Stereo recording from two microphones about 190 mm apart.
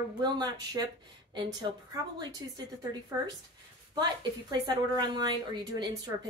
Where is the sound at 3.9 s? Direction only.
20° right (ahead or behind).